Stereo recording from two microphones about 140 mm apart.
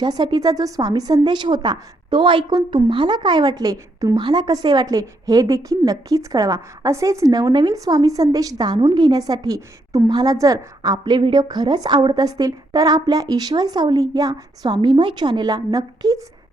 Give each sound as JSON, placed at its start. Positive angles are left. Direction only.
{"t": 0.0, "sound": "a woman's voice", "side_deg": -30}